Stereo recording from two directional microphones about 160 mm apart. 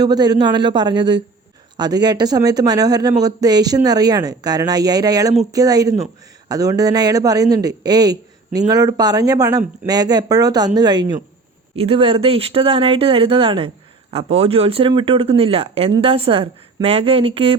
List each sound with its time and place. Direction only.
0.0 s speech: 25° right (ahead or behind)